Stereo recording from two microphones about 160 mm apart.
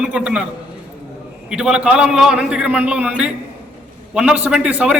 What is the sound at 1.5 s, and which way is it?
A man's voice, 5° right (ahead or behind).